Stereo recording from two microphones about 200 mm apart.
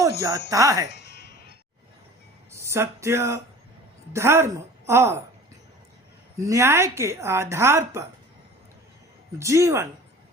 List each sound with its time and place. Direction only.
0.2 s speech: 15° right (ahead or behind)
0.9 s music: 60° left (ahead or behind)
2.5 s speech: 15° right (ahead or behind)
6.4 s speech: 15° right (ahead or behind)
9.4 s speech: 15° right (ahead or behind)